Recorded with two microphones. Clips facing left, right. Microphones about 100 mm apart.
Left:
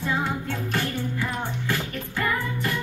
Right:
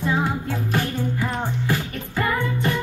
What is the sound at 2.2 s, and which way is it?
Music, 25° right (ahead or behind).